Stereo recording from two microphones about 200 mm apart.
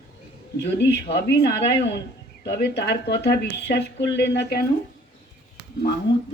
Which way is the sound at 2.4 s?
55° left (ahead or behind).